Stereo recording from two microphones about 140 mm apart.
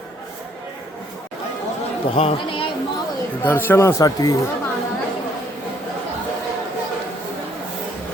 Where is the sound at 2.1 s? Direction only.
45° left (ahead or behind).